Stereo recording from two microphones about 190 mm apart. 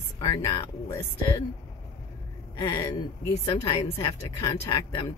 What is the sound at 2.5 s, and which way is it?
Speech, 25° left (ahead or behind).